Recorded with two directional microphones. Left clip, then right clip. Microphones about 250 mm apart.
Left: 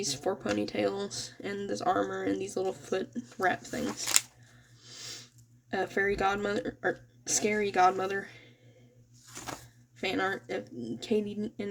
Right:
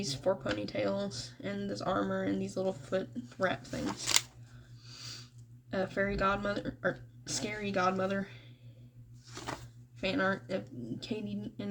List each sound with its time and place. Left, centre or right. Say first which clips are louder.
0.0 s speech: even; left
5.7 s speech: left 4 dB; left
10.0 s speech: left 1 dB; left